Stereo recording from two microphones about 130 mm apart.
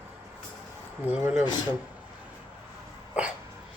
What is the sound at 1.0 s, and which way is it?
Speech, 10° right (ahead or behind).